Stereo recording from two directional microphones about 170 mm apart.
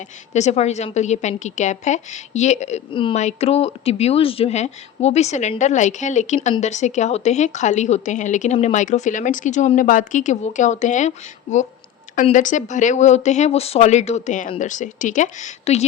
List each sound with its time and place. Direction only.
0.3 s speech: 40° left (ahead or behind)
2.9 s speech: 30° left (ahead or behind)
3.2 s speech: 40° left (ahead or behind)
12.1 s speech: 50° left (ahead or behind)